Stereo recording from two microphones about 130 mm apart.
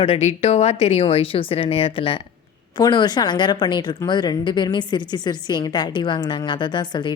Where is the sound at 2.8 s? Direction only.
35° left (ahead or behind).